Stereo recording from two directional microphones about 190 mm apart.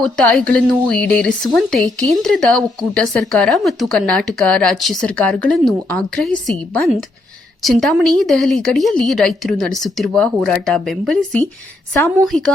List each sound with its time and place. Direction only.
0.0 s speech: 5° left (ahead or behind)